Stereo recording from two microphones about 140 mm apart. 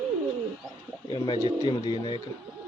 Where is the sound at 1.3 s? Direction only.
25° left (ahead or behind).